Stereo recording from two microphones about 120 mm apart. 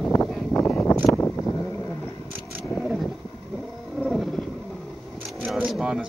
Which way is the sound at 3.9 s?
Centre (ahead or behind).